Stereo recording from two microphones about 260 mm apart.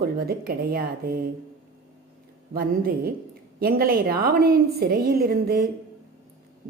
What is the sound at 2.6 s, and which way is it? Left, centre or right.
A woman's voice, right.